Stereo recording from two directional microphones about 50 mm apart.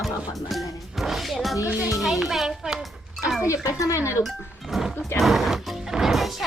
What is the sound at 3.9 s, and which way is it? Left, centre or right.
Speech, left.